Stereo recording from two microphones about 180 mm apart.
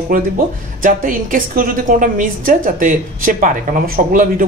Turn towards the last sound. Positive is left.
turn(degrees=-50)  # may be behind; listen again after turning